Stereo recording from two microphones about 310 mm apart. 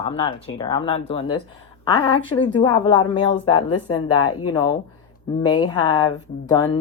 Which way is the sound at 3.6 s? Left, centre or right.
Left.